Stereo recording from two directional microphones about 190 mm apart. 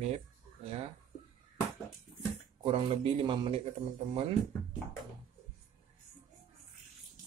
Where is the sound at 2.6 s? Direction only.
30° right (ahead or behind).